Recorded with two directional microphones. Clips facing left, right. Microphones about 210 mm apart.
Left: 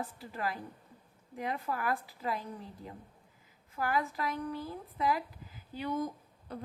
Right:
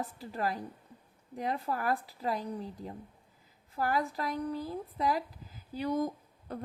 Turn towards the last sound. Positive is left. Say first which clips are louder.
# right 2 dB
turn(degrees=-45)  # may be behind; listen again after turning